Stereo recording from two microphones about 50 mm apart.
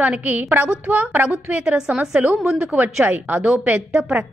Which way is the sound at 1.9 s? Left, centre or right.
Right.